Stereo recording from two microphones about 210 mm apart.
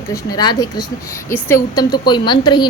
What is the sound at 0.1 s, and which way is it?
A woman's voice, 15° left (ahead or behind).